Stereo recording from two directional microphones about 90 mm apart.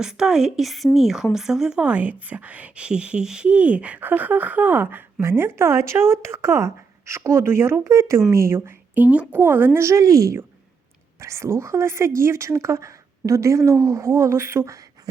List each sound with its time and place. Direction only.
0.0 s a woman's voice: 5° right (ahead or behind); by 9.0 s 30° right (ahead or behind)
9.0 s a woman's voice: 15° right (ahead or behind); by 14.8 s 30° right (ahead or behind)